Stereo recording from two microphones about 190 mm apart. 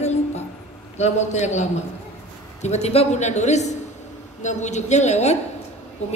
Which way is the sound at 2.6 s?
35° left (ahead or behind).